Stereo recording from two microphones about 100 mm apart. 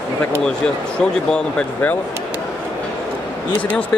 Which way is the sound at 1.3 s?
15° left (ahead or behind).